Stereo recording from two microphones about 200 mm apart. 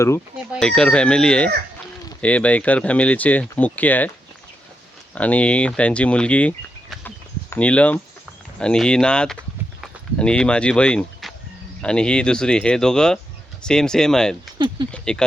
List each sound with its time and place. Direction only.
0.5 s speech: 5° left (ahead or behind)
5.1 s speech: 5° left (ahead or behind)
7.5 s speech: 5° left (ahead or behind)